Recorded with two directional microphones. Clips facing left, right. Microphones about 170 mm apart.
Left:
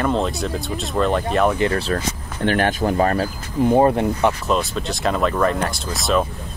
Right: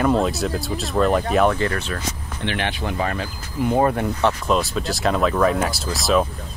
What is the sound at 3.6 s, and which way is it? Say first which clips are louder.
Speech: left 4 dB; 25° left (ahead or behind).